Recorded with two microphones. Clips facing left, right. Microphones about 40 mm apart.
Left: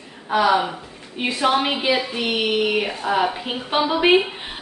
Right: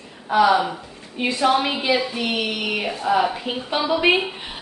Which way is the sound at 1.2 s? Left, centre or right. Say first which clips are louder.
Right 1 dB; left.